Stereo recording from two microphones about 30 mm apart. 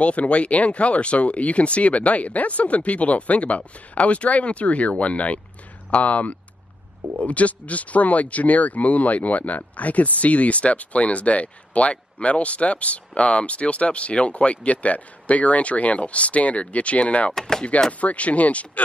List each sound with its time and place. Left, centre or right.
0.0 s speech: left
17.3 s speech: left
18.0 s speech: left